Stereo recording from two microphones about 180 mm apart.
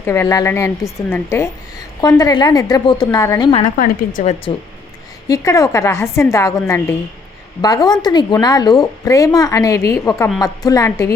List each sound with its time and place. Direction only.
0.0 s a woman's voice: 15° left (ahead or behind)
3.8 s a woman's voice: 45° left (ahead or behind)
5.3 s a woman's voice: 20° left (ahead or behind)